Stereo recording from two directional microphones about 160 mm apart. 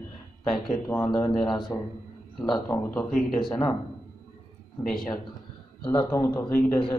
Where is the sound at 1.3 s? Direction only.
Centre (ahead or behind).